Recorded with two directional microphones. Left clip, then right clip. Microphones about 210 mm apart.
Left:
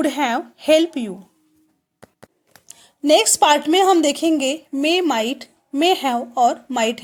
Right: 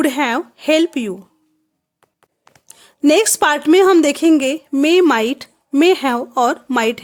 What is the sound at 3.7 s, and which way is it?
A woman's voice, 25° right (ahead or behind).